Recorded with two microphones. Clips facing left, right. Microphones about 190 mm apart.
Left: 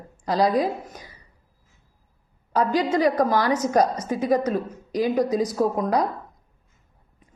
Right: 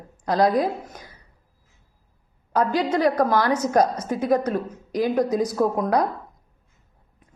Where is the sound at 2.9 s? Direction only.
10° left (ahead or behind).